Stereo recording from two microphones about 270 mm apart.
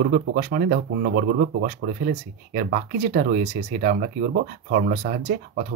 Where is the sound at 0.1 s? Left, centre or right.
Right.